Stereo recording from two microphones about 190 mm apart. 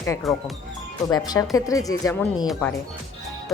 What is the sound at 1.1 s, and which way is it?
Speech, 20° left (ahead or behind).